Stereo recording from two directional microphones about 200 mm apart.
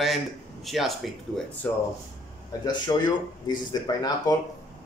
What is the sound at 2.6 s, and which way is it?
Speech, 20° left (ahead or behind).